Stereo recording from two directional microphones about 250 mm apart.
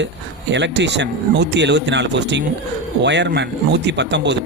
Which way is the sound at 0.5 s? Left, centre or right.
Right.